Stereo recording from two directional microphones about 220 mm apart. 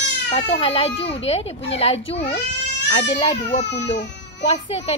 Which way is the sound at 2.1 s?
50° left (ahead or behind).